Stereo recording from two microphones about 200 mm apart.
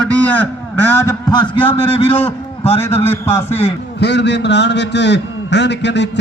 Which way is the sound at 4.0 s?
60° left (ahead or behind).